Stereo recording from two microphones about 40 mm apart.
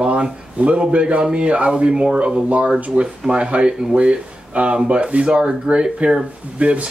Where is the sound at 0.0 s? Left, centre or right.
Right.